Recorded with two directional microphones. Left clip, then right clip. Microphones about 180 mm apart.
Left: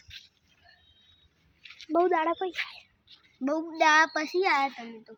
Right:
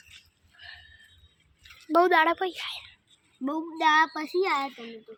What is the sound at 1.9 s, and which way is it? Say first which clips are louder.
Speech: right 4 dB; 5° left (ahead or behind).